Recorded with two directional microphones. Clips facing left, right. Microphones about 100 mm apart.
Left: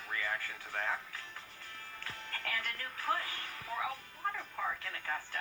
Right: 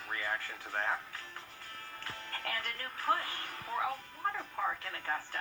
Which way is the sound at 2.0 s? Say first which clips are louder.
Right 2 dB; 30° right (ahead or behind).